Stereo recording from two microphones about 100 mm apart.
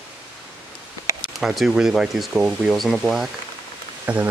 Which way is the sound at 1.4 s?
Centre (ahead or behind).